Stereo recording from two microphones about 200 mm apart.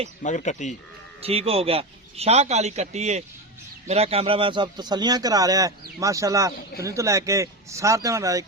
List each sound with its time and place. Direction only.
0.2 s speech: 40° left (ahead or behind)
1.2 s a man's voice: 30° right (ahead or behind)